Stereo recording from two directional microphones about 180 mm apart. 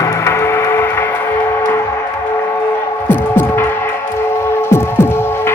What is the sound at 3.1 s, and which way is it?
Hum, 10° left (ahead or behind).